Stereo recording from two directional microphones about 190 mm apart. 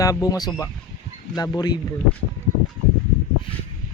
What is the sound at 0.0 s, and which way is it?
Speech, 20° left (ahead or behind).